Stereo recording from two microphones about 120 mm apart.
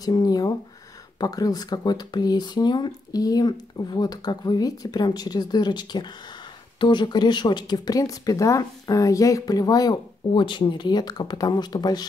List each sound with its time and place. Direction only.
0.0 s a woman's voice: 30° left (ahead or behind)